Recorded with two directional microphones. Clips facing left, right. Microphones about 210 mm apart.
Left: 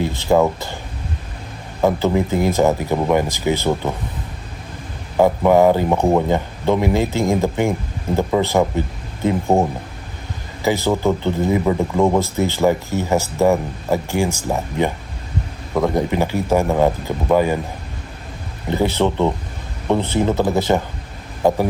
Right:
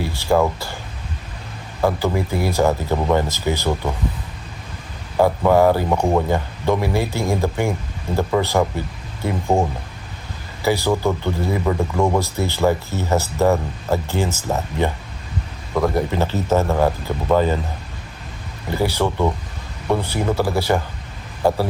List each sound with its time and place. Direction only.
0.0 s speech: 20° left (ahead or behind)
1.8 s speech: 20° left (ahead or behind)
5.1 s speech: 15° left (ahead or behind)
16.0 s speech: 15° left (ahead or behind)
18.7 s speech: 20° left (ahead or behind)